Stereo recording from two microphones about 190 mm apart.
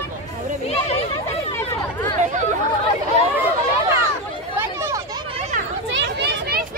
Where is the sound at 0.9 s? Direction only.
30° left (ahead or behind).